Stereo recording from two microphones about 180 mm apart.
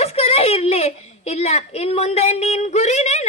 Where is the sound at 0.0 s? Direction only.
35° left (ahead or behind).